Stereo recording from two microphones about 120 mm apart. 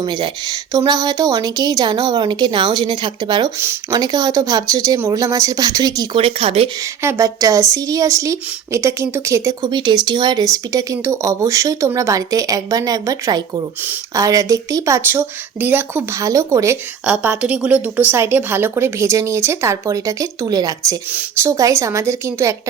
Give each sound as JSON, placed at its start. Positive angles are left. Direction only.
{"t": 0.0, "sound": "speech", "side_deg": -40}
{"t": 3.6, "sound": "a woman's voice", "side_deg": -20}
{"t": 4.0, "sound": "a woman's voice", "side_deg": -35}
{"t": 6.1, "sound": "speech", "side_deg": -50}
{"t": 7.0, "sound": "a woman's voice", "side_deg": -25}
{"t": 9.6, "sound": "a woman's voice", "side_deg": -40}
{"t": 16.2, "sound": "a woman's voice", "side_deg": -25}
{"t": 17.1, "sound": "a woman's voice", "side_deg": -10}